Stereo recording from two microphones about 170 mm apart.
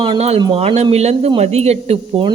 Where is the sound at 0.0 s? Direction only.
35° right (ahead or behind).